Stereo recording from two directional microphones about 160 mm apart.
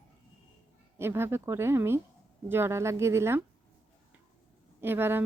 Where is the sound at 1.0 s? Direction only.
15° right (ahead or behind).